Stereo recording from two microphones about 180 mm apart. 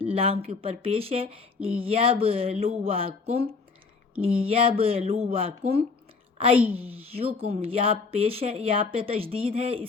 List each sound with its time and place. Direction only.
0.1 s a woman's voice: 30° right (ahead or behind)